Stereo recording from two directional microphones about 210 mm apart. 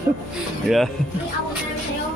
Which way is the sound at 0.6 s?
Centre (ahead or behind).